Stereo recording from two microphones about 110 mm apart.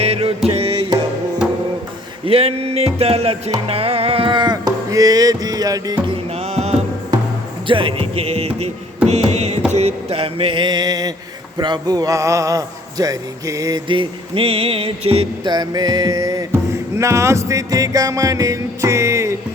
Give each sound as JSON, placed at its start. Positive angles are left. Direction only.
{"t": 0.0, "sound": "music", "side_deg": -65}
{"t": 2.2, "sound": "music", "side_deg": -60}
{"t": 6.3, "sound": "music", "side_deg": -75}
{"t": 7.7, "sound": "music", "side_deg": -55}
{"t": 9.0, "sound": "mantra", "side_deg": -85}
{"t": 9.7, "sound": "a sound", "side_deg": -70}
{"t": 11.5, "sound": "a man's voice", "side_deg": -40}
{"t": 15.4, "sound": "a man's voice", "side_deg": -40}
{"t": 17.0, "sound": "music", "side_deg": -25}